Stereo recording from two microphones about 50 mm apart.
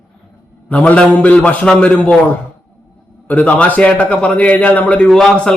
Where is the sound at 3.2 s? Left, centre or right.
Left.